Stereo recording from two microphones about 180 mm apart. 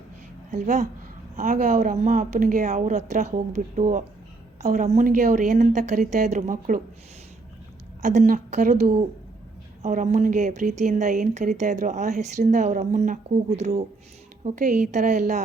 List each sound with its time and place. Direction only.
0.5 s speech: 40° right (ahead or behind)
8.0 s a woman's voice: 40° right (ahead or behind)